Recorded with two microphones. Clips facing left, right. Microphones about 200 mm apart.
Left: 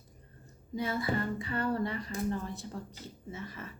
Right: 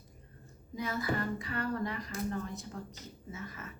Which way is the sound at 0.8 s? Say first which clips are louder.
Left 2 dB; 30° left (ahead or behind).